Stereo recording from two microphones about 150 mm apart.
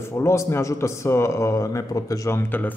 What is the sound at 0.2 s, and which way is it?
A man's voice, 20° left (ahead or behind).